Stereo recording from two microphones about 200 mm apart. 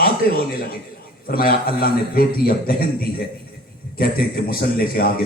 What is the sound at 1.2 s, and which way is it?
A man's voice, 50° left (ahead or behind).